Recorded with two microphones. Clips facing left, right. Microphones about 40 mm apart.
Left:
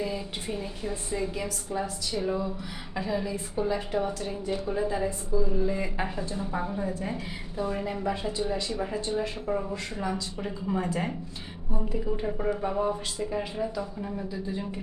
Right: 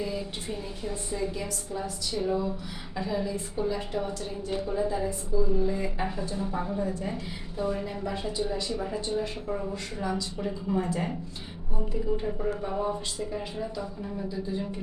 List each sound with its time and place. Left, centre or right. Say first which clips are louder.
0.0 s a woman's voice: left 1 dB; centre
2.2 s a woman's voice: right 3 dB; centre
5.0 s a woman's voice: even; centre
5.7 s a woman's voice: even; centre
12.4 s a woman's voice: left 2 dB; left